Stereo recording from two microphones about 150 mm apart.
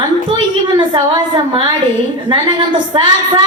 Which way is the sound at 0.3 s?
30° right (ahead or behind).